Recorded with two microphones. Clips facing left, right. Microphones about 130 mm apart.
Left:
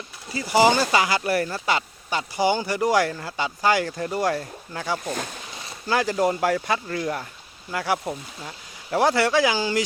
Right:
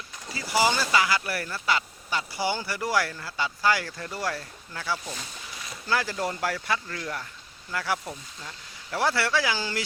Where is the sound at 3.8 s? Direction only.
40° left (ahead or behind).